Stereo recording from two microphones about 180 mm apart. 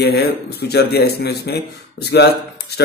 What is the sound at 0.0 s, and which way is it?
A man's voice, 60° left (ahead or behind).